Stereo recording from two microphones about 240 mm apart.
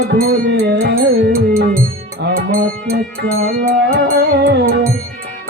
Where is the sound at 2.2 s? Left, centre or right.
Right.